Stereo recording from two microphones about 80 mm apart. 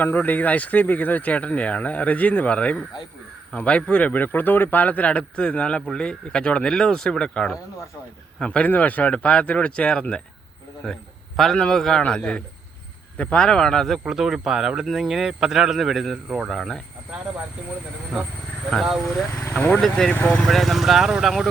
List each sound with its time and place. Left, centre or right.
0.0 s speech: left
11.5 s speech: centre
14.0 s speech: centre
18.7 s speech: centre
19.3 s speech: left
19.8 s speech: centre
20.1 s speech: left
20.4 s speech: centre